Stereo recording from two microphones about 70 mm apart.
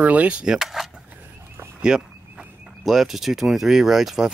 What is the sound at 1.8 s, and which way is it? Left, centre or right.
Speech, centre.